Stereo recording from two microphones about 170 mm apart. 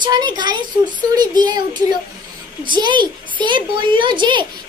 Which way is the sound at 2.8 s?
25° right (ahead or behind).